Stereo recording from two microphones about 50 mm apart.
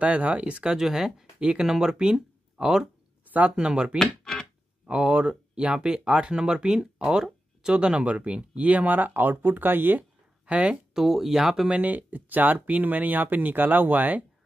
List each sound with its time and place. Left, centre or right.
0.0 s speech: right
0.7 s speech: centre
4.2 s a sound: centre
4.8 s speech: right
10.4 s speech: right
11.0 s speech: centre
11.7 s speech: right